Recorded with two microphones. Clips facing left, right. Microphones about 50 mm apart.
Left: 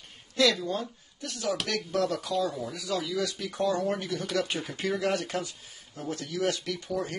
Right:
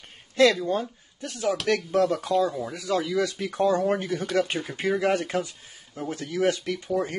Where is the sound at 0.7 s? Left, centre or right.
Right.